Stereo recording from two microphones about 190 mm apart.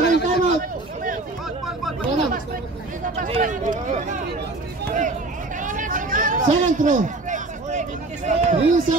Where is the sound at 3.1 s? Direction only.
35° right (ahead or behind).